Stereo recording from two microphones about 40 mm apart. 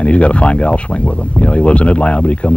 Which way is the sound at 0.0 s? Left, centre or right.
Left.